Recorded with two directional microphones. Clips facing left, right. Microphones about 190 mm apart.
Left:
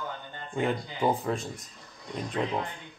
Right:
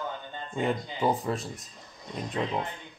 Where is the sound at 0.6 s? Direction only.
Centre (ahead or behind).